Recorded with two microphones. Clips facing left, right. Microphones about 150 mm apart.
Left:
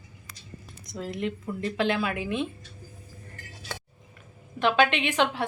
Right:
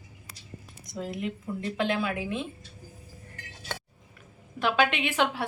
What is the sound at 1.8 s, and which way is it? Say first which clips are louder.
Speech: left 2 dB; 85° left.